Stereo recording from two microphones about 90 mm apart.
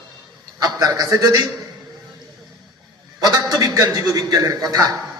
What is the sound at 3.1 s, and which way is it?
A man's voice, 45° right (ahead or behind).